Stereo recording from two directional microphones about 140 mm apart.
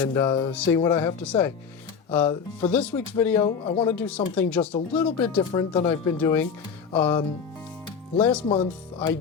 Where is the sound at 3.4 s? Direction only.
45° left (ahead or behind).